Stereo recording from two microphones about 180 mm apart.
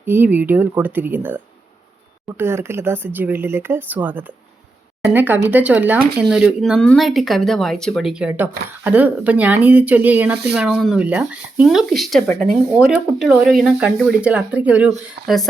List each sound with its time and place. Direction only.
0.0 s speech: 10° right (ahead or behind)